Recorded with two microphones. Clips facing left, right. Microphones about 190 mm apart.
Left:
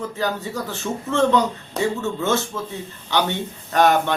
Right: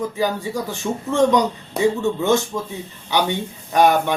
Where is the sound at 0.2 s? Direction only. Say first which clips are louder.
Right 1 dB; 10° right (ahead or behind).